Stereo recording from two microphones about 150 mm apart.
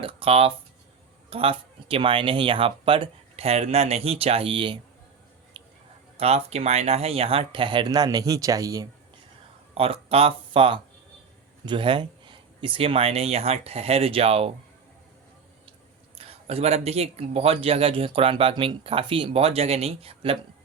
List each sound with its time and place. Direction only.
0.0 s speech: 40° right (ahead or behind)
6.1 s speech: 45° right (ahead or behind); by 8.9 s 25° right (ahead or behind)
9.7 s speech: 40° right (ahead or behind)
16.1 s speech: 40° right (ahead or behind)